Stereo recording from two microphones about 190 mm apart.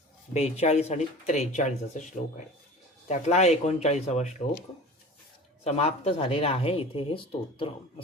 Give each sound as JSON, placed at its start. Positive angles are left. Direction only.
{"t": 0.3, "sound": "speech", "side_deg": 35}
{"t": 3.1, "sound": "speech", "side_deg": 35}
{"t": 5.6, "sound": "speech", "side_deg": 35}